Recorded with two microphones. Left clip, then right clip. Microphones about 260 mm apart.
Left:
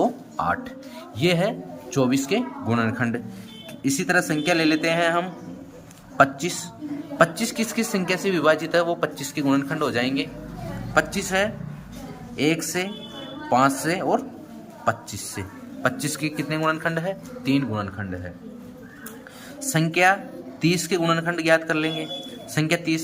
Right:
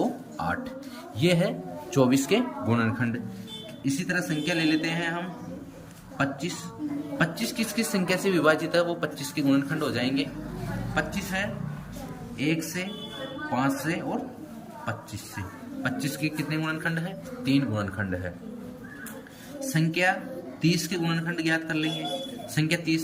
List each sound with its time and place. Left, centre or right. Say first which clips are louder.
0.0 s music: left 6 dB; centre
1.2 s a man's voice: left 3 dB; centre
15.4 s speech: left 6 dB; centre
19.6 s speech: left 6 dB; centre